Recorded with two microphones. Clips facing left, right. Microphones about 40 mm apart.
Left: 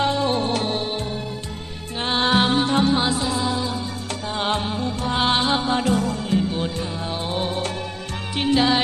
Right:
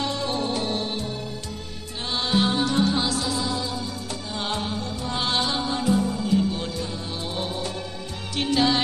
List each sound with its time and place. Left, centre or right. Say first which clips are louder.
0.0 s music: left 5 dB; left
5.9 s music: left 1 dB; left
6.5 s music: left 4 dB; left
8.5 s music: left 3 dB; centre